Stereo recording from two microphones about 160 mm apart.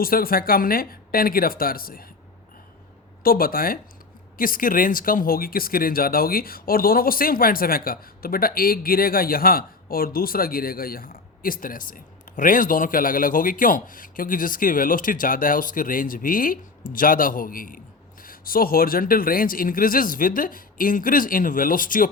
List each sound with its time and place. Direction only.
0.0 s speech: 65° left (ahead or behind)
3.2 s speech: 65° left (ahead or behind)